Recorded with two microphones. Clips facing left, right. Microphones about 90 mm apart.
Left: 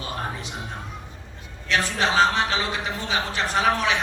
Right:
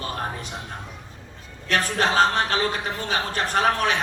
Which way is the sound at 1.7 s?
45° right (ahead or behind).